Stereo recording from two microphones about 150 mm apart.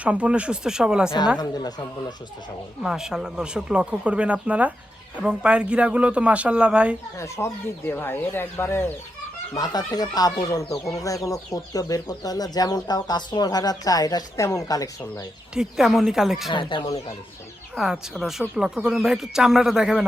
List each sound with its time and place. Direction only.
0.0 s speech: 10° right (ahead or behind)
1.4 s speech: 25° left (ahead or behind)
2.8 s speech: 5° right (ahead or behind)
7.2 s speech: 20° left (ahead or behind)
9.6 s speech: 25° left (ahead or behind)
15.5 s speech: centre (ahead or behind)
16.5 s speech: 35° left (ahead or behind)
17.7 s speech: 5° right (ahead or behind)